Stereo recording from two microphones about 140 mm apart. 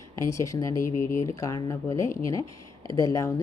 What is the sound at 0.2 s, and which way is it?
Speech, 20° left (ahead or behind).